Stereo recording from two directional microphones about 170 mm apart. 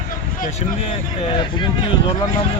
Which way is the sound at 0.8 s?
35° left (ahead or behind).